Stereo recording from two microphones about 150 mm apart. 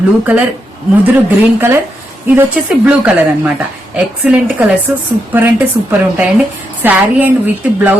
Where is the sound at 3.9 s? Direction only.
10° right (ahead or behind).